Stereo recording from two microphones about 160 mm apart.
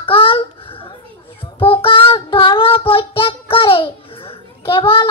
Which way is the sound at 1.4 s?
35° left (ahead or behind).